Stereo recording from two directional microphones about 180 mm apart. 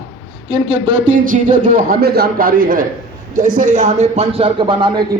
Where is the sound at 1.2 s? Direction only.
50° right (ahead or behind).